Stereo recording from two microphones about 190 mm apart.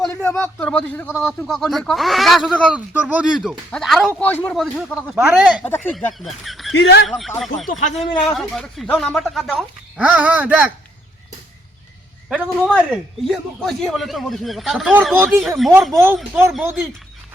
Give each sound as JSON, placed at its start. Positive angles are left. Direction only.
{"t": 0.1, "sound": "a man's voice", "side_deg": 10}
{"t": 5.6, "sound": "speech", "side_deg": 10}
{"t": 6.1, "sound": "speech", "side_deg": 0}
{"t": 6.7, "sound": "speech", "side_deg": 60}
{"t": 7.1, "sound": "a man's voice", "side_deg": 0}
{"t": 12.3, "sound": "a man's voice", "side_deg": -5}
{"t": 14.9, "sound": "speech", "side_deg": -10}
{"t": 15.4, "sound": "a man's voice", "side_deg": 0}